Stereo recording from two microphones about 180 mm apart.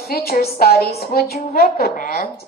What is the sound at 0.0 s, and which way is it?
A woman's voice, 55° left (ahead or behind).